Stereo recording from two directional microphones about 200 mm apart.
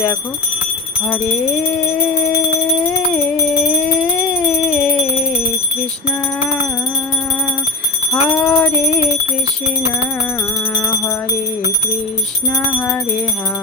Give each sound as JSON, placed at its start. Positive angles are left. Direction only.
{"t": 3.8, "sound": "music", "side_deg": 5}
{"t": 8.1, "sound": "jingle bell", "side_deg": 5}
{"t": 10.8, "sound": "music", "side_deg": 15}